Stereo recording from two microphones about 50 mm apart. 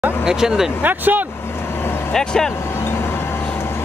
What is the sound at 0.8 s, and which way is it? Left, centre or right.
Speech, right.